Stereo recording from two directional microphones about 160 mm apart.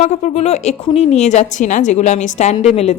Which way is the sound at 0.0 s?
45° left (ahead or behind).